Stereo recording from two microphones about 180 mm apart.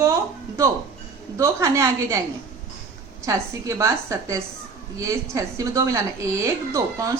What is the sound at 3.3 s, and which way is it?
A woman's voice, 15° right (ahead or behind).